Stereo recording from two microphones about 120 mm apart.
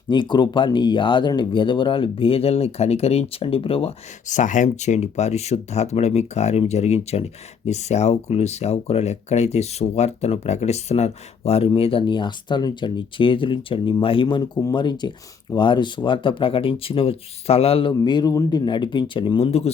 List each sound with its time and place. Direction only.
0.1 s speech: 40° left (ahead or behind)
4.3 s speech: 90° left; by 19.7 s 60° left (ahead or behind)